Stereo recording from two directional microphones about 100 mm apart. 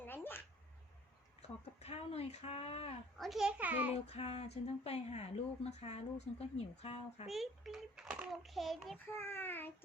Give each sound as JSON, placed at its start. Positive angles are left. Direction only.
{"t": 0.0, "sound": "a sound", "side_deg": 20}
{"t": 1.4, "sound": "speech", "side_deg": 90}
{"t": 3.2, "sound": "a child's voice", "side_deg": 0}
{"t": 3.6, "sound": "a child's voice", "side_deg": -15}
{"t": 4.0, "sound": "speech", "side_deg": 90}
{"t": 7.3, "sound": "a child's voice", "side_deg": 0}
{"t": 9.1, "sound": "a child's voice", "side_deg": 20}